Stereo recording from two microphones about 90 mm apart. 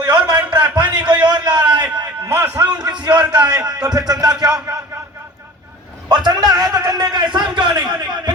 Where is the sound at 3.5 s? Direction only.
45° right (ahead or behind).